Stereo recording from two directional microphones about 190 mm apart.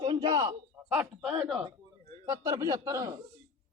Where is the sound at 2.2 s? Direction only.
15° right (ahead or behind).